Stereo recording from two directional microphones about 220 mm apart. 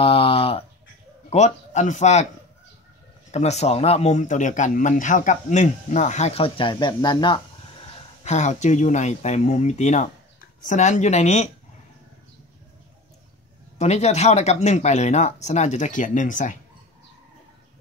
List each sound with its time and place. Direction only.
0.0 s a sound: 25° left (ahead or behind)
1.3 s speech: 30° left (ahead or behind)
3.3 s speech: 30° left (ahead or behind)
8.2 s speech: 30° left (ahead or behind)
13.7 s speech: 30° left (ahead or behind)